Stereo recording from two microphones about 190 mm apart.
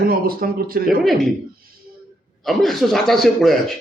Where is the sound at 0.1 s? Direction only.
50° right (ahead or behind).